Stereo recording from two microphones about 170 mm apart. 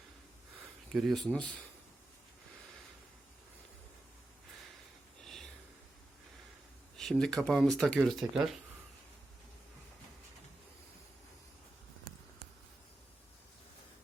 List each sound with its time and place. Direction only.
0.9 s speech: centre (ahead or behind)
5.2 s a sound: centre (ahead or behind)
6.9 s speech: 5° left (ahead or behind)